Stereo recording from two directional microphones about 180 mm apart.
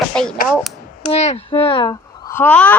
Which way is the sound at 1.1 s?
35° left (ahead or behind).